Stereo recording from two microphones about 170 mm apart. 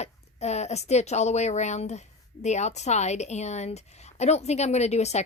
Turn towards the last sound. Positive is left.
turn(degrees=40)  # may be behind; listen again after turning